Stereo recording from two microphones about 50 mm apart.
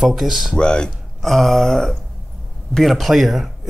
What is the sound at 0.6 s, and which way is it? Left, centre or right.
Speech, centre.